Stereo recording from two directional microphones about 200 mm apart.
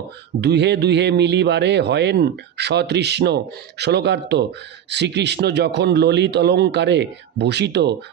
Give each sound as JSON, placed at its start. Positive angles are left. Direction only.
{"t": 0.4, "sound": "a man's voice", "side_deg": -60}